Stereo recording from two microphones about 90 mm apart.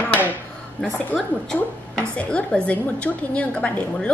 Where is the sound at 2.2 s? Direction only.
10° left (ahead or behind).